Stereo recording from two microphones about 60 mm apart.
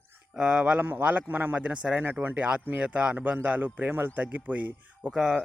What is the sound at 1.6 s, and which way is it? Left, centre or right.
Speech, centre.